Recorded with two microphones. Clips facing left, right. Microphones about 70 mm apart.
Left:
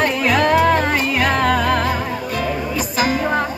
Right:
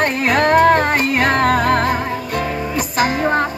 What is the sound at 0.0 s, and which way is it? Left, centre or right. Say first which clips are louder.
Music: right 1 dB; right.